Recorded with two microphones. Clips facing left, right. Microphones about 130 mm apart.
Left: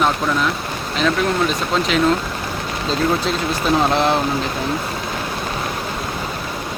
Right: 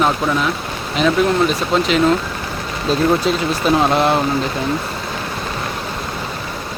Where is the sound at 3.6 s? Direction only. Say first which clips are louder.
Right 2 dB; 5° right (ahead or behind).